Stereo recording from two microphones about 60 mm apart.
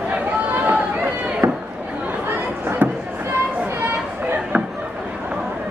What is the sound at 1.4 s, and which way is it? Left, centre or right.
Chop, right.